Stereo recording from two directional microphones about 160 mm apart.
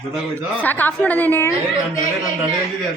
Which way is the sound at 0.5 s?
10° left (ahead or behind).